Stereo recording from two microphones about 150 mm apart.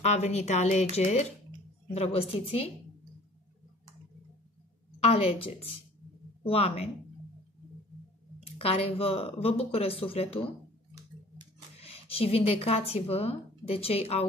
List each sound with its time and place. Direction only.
0.0 s speech: 50° left (ahead or behind)
5.0 s speech: 40° left (ahead or behind)
8.5 s speech: 40° left (ahead or behind)
11.8 s speech: 40° left (ahead or behind)